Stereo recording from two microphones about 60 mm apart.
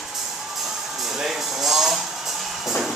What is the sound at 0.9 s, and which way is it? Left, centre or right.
Music, centre.